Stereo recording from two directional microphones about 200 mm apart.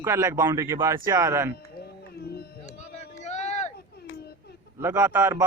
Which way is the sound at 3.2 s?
35° left (ahead or behind).